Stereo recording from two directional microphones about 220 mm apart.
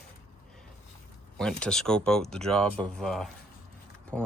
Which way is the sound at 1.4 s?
5° left (ahead or behind).